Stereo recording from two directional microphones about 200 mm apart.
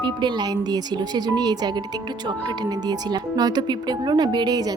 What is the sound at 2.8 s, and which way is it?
Speech, 20° right (ahead or behind).